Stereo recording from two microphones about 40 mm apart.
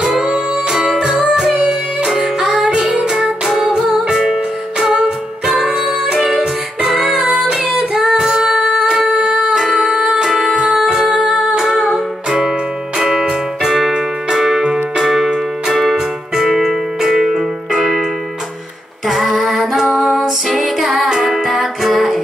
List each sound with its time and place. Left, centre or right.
0.2 s music: centre
2.6 s music: centre
3.4 s music: centre
6.1 s music: centre
7.2 s music: right
7.7 s female singing: centre
8.8 s music: centre
13.0 s music: centre
15.7 s keyboard: centre
19.0 s music: centre